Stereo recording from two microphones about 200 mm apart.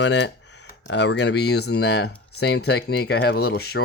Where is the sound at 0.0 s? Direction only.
60° left (ahead or behind).